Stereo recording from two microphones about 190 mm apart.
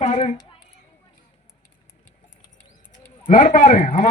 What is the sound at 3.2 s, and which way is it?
Speech, 40° left (ahead or behind).